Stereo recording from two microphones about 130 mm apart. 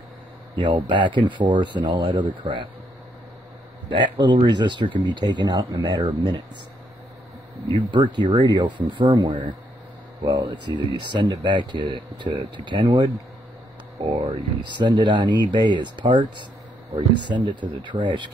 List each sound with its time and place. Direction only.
0.7 s speech: 40° right (ahead or behind)
3.9 s speech: 35° right (ahead or behind)
7.6 s speech: 35° right (ahead or behind)
14.1 s speech: 35° right (ahead or behind)